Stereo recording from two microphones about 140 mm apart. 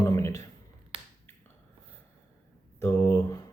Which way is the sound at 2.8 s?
20° left (ahead or behind).